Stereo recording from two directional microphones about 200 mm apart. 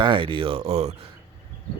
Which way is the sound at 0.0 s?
25° right (ahead or behind).